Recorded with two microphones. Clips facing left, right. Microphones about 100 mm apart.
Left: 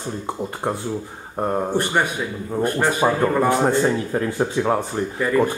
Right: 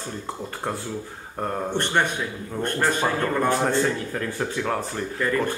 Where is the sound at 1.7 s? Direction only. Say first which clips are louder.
Left 3 dB; 10° left (ahead or behind).